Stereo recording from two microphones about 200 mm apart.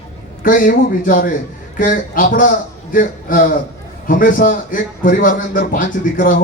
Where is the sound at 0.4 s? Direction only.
40° left (ahead or behind).